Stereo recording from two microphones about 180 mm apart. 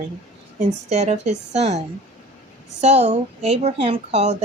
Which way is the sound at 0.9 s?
35° right (ahead or behind).